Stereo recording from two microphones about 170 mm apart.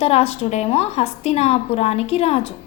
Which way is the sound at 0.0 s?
35° left (ahead or behind).